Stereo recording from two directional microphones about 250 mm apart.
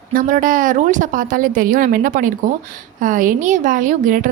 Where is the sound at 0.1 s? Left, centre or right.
Right.